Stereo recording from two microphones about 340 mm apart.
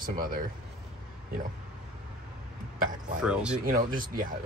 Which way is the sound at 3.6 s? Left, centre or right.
Right.